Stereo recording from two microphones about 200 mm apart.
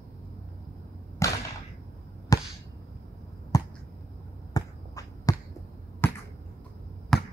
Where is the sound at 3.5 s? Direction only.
20° left (ahead or behind).